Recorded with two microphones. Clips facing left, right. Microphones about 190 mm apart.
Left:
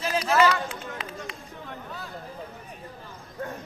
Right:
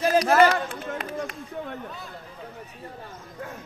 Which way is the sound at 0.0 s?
50° right (ahead or behind).